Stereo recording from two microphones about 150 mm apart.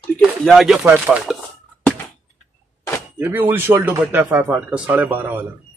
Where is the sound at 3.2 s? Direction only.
15° right (ahead or behind).